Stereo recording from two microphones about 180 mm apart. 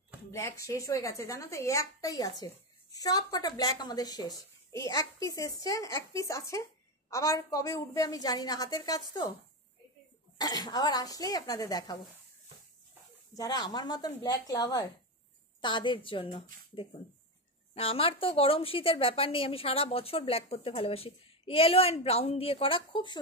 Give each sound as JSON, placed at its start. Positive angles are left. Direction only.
{"t": 0.3, "sound": "a woman's voice", "side_deg": 15}
{"t": 10.3, "sound": "a woman's voice", "side_deg": 20}
{"t": 13.3, "sound": "a woman's voice", "side_deg": 20}
{"t": 17.7, "sound": "a woman's voice", "side_deg": 30}